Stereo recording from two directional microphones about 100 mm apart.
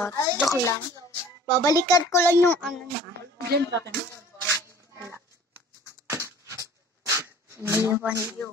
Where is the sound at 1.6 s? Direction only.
35° left (ahead or behind).